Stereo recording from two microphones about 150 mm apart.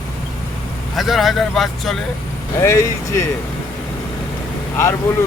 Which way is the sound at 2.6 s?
15° left (ahead or behind).